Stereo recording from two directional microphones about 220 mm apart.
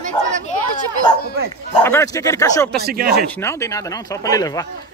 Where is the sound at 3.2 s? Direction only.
10° left (ahead or behind).